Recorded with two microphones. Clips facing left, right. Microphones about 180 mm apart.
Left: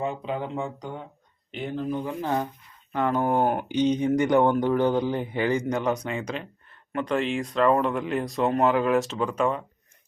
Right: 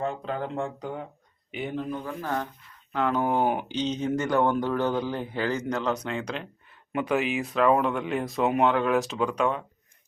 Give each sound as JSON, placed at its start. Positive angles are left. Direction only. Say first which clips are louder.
{"t": 0.0, "sound": "speech", "louder": "left 1 dB", "side_deg": 5}
{"t": 1.9, "sound": "speech", "louder": "left 4 dB", "side_deg": 15}